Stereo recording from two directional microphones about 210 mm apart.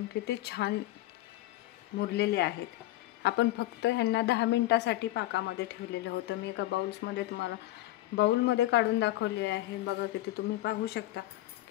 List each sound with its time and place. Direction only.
0.2 s a woman's voice: 50° left (ahead or behind)
2.0 s a woman's voice: 50° left (ahead or behind)